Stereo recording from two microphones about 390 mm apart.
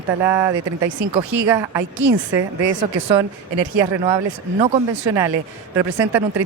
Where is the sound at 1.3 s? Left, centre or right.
Right.